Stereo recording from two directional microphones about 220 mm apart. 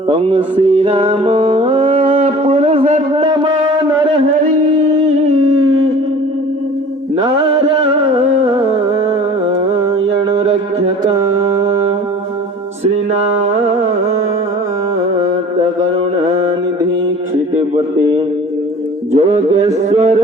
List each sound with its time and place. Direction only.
0.1 s mantra: 20° right (ahead or behind)
0.8 s music: 25° right (ahead or behind)
10.2 s a sound: 30° right (ahead or behind)
11.0 s mantra: 15° right (ahead or behind)
12.8 s music: 30° right (ahead or behind)
19.1 s a sound: 30° right (ahead or behind)